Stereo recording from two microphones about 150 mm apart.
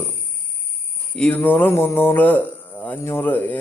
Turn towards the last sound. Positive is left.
turn(degrees=10)  # may be behind; listen again after turning